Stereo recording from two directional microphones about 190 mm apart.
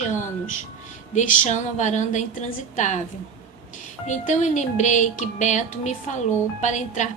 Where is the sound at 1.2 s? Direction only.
40° left (ahead or behind).